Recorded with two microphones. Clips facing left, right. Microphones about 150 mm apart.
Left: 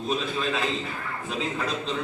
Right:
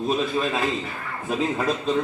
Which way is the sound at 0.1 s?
45° right (ahead or behind).